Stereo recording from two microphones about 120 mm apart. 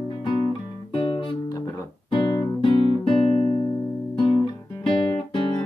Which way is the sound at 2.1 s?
45° left (ahead or behind).